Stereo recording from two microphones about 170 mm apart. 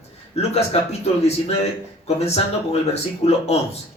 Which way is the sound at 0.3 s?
40° left (ahead or behind).